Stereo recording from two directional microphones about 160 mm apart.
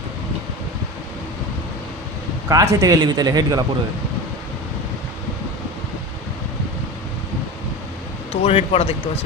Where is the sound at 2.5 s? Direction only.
20° right (ahead or behind).